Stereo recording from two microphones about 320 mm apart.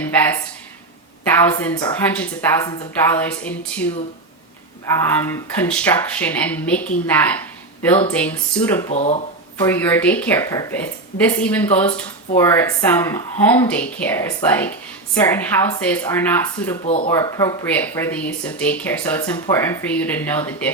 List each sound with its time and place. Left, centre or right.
0.0 s a sound: centre
1.4 s speech: centre
5.0 s speech: centre
8.9 s speech: left
9.6 s speech: centre
16.8 s speech: centre
17.1 s speech: centre